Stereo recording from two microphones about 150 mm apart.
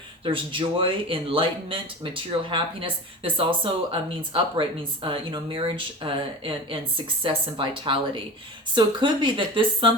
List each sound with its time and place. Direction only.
0.3 s speech: 35° right (ahead or behind)